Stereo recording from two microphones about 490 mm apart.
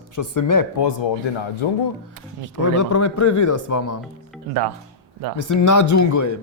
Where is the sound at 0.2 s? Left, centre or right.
Left.